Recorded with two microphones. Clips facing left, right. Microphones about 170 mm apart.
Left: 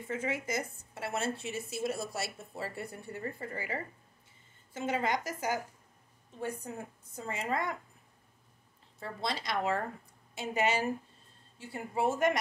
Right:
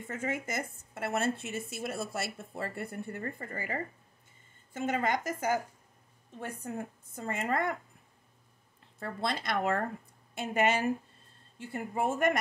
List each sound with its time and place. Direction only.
0.0 s speech: 45° right (ahead or behind)
7.2 s speech: 55° right (ahead or behind)
9.0 s speech: 50° right (ahead or behind)